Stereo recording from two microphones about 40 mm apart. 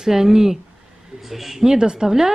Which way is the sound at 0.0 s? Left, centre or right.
Centre.